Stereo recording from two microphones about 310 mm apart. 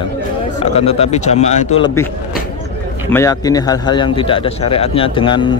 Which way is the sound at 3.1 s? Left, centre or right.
Centre.